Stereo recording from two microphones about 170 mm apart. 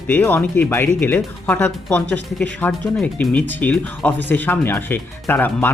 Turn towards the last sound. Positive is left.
turn(degrees=10)  # may be behind; listen again after turning